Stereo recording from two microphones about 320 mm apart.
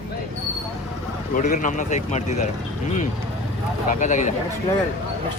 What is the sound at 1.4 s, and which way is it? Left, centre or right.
A man's voice, left.